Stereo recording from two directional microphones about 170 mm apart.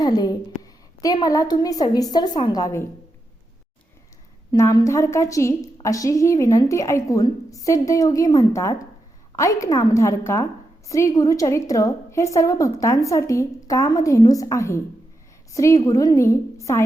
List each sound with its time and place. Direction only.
0.0 s a woman's voice: 25° left (ahead or behind)
4.5 s a woman's voice: 20° left (ahead or behind)